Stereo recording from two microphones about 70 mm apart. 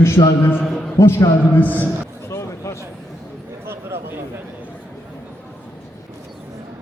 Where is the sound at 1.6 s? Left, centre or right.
Left.